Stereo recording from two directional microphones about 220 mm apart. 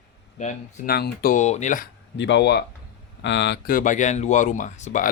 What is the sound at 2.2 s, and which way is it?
Speech, 55° left (ahead or behind).